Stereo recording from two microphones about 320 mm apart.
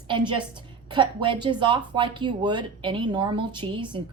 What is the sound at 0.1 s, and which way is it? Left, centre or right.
Speech, centre.